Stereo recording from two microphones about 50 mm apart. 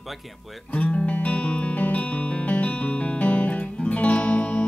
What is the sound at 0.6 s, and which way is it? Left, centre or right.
Music, left.